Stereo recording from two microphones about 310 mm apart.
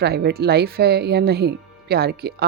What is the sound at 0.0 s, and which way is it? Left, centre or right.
Speech, right.